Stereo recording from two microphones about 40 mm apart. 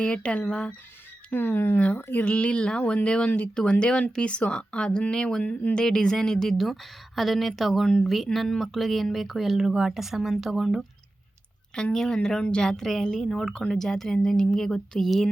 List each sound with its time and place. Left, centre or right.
0.0 s speech: left
1.3 s speech: left
2.2 s speech: left
3.2 s speech: left
3.5 s speech: left
5.8 s a woman's voice: centre
11.7 s a woman's voice: centre
12.6 s a woman's voice: centre
13.1 s a woman's voice: left